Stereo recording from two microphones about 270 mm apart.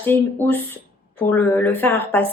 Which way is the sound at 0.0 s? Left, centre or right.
Centre.